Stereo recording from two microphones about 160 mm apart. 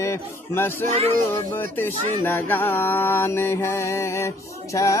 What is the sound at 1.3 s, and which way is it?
Mantra, 15° left (ahead or behind).